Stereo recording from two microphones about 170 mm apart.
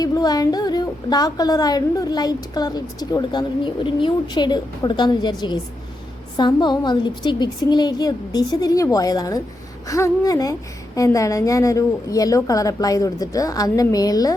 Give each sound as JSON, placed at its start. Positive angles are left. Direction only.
{"t": 0.0, "sound": "a woman's voice", "side_deg": 25}